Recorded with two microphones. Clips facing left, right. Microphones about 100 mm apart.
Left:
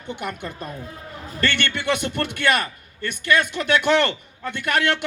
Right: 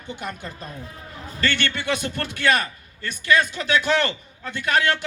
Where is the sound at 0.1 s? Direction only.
55° left (ahead or behind).